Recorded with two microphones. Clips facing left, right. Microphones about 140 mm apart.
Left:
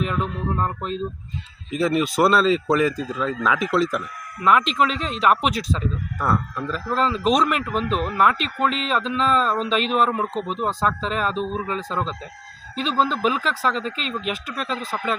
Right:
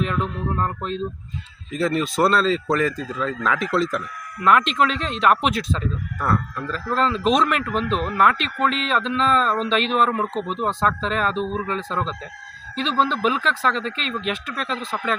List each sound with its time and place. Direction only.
0.0 s speech: 5° left (ahead or behind)
3.0 s speech: 15° left (ahead or behind)